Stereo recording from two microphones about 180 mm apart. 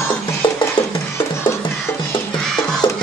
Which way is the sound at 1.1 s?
15° left (ahead or behind).